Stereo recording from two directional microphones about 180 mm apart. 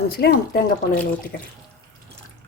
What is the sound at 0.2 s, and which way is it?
Speech, 60° left (ahead or behind).